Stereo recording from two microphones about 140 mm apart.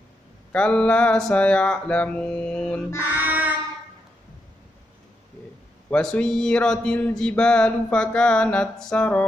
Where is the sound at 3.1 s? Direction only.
10° right (ahead or behind).